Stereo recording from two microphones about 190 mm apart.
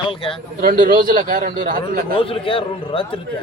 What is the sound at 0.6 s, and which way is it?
A man's voice, 50° right (ahead or behind).